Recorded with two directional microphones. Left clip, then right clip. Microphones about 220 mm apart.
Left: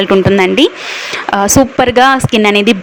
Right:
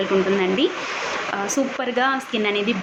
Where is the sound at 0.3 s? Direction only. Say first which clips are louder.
Left 11 dB; 50° left (ahead or behind).